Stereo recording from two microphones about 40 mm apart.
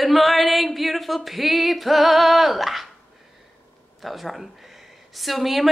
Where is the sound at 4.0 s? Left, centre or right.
Centre.